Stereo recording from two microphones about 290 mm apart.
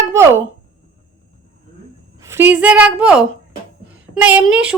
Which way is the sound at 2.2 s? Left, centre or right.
Centre.